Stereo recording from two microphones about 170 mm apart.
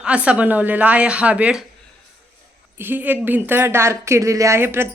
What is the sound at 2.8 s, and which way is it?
A woman's voice, 10° right (ahead or behind).